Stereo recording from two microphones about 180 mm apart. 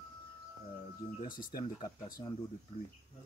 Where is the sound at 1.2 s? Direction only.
50° left (ahead or behind).